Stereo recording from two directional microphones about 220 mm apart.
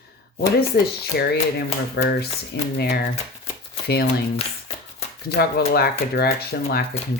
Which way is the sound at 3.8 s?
45° left (ahead or behind).